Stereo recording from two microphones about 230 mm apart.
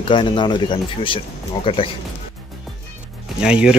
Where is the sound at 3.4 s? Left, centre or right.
Centre.